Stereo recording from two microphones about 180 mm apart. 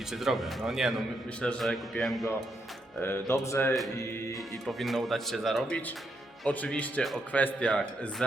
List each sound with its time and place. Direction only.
0.1 s speech: centre (ahead or behind)
3.0 s speech: 15° left (ahead or behind)
4.6 s speech: centre (ahead or behind)